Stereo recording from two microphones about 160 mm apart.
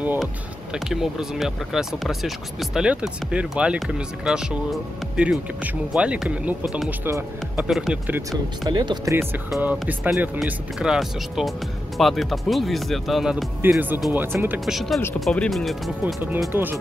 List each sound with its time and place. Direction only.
1.4 s speech: centre (ahead or behind)
8.1 s speech: 25° right (ahead or behind)
9.6 s speech: 10° right (ahead or behind)
13.6 s speech: 10° right (ahead or behind)
14.7 s speech: centre (ahead or behind)
16.0 s speech: 10° right (ahead or behind)